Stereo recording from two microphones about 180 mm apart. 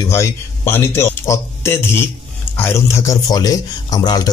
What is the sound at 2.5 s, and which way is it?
Speech, 15° left (ahead or behind).